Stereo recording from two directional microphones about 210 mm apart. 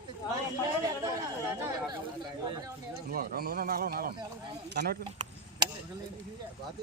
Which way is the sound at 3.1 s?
45° right (ahead or behind).